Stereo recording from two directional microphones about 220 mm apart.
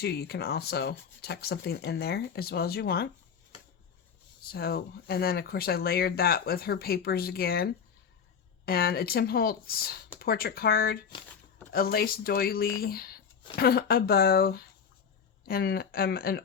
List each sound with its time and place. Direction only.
0.0 s speech: 45° left (ahead or behind)
4.5 s speech: 45° left (ahead or behind)